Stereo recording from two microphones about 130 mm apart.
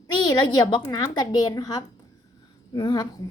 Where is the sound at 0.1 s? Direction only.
35° left (ahead or behind).